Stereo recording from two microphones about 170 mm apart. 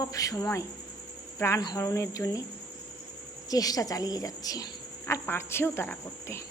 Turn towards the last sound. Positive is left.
turn(degrees=15)  # may be behind; listen again after turning